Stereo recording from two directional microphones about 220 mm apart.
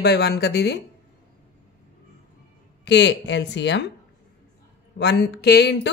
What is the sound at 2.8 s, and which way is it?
A woman's voice, 50° left (ahead or behind).